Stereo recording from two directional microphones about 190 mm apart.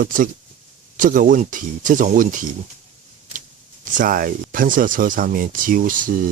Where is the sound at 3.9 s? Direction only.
45° right (ahead or behind).